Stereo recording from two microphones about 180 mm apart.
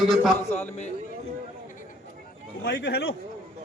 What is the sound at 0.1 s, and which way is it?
Speech, centre (ahead or behind).